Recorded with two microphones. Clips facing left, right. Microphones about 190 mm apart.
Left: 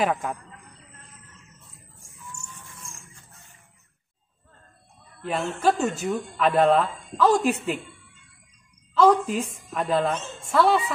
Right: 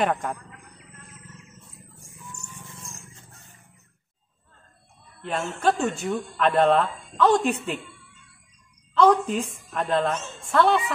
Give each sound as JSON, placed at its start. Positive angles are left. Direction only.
{"t": 0.0, "sound": "speech", "side_deg": 5}
{"t": 2.1, "sound": "music", "side_deg": -10}
{"t": 5.6, "sound": "speech", "side_deg": 0}
{"t": 8.9, "sound": "speech", "side_deg": 5}